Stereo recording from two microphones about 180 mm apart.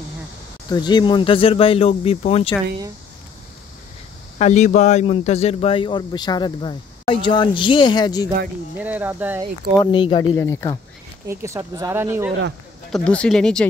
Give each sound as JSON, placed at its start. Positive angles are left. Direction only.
{"t": 0.7, "sound": "speech", "side_deg": 25}
{"t": 4.4, "sound": "speech", "side_deg": 40}
{"t": 8.7, "sound": "speech", "side_deg": -10}
{"t": 9.8, "sound": "speech", "side_deg": 25}
{"t": 10.3, "sound": "speech", "side_deg": 15}
{"t": 11.2, "sound": "speech", "side_deg": -15}
{"t": 12.9, "sound": "speech", "side_deg": 5}